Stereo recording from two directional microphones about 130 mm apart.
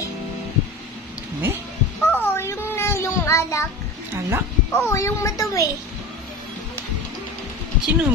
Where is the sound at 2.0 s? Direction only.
15° left (ahead or behind).